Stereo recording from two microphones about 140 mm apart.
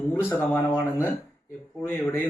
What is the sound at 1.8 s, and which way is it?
Speech, 15° left (ahead or behind).